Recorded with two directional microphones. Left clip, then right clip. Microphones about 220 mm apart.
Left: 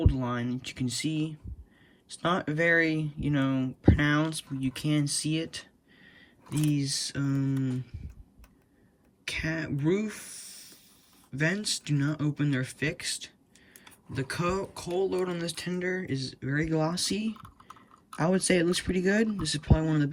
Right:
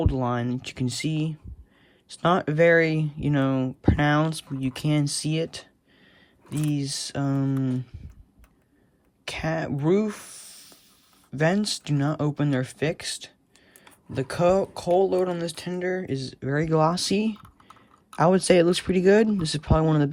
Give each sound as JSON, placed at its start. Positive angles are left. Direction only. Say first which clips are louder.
{"t": 0.0, "sound": "speech", "louder": "right 5 dB", "side_deg": -20}
{"t": 9.2, "sound": "speech", "louder": "right 4 dB", "side_deg": -15}